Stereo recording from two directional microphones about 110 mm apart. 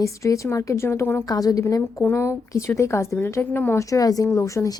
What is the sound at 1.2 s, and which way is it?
A woman's voice, 35° left (ahead or behind).